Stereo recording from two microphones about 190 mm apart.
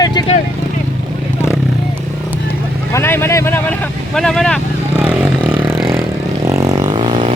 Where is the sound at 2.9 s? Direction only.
10° left (ahead or behind).